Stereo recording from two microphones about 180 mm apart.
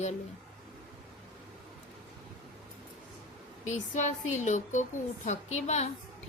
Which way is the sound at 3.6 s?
40° left (ahead or behind).